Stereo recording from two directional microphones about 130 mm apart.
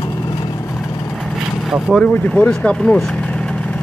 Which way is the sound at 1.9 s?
5° left (ahead or behind).